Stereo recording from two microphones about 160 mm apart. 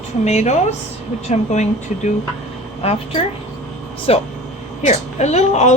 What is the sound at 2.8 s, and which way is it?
A woman's voice, 35° left (ahead or behind).